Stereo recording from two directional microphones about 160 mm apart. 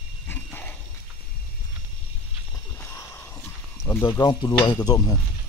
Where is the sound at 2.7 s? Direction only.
15° left (ahead or behind).